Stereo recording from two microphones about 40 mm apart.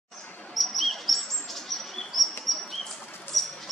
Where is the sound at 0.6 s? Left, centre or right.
Centre.